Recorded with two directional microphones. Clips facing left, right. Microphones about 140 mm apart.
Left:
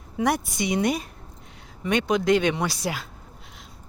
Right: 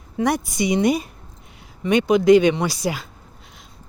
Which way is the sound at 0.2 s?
5° left (ahead or behind).